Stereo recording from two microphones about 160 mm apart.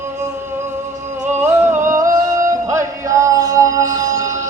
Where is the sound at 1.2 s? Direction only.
15° right (ahead or behind).